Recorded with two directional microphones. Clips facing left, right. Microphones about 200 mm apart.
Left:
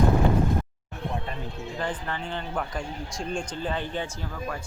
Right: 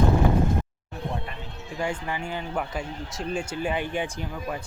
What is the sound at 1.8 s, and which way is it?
Speech, 10° right (ahead or behind).